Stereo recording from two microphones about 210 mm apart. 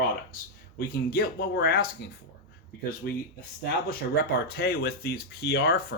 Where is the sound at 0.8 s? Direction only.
45° left (ahead or behind).